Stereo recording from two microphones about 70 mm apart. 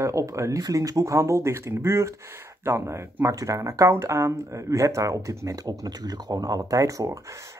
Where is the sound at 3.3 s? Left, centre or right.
Right.